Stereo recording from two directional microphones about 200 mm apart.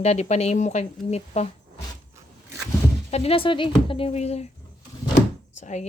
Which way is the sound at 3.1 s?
30° left (ahead or behind).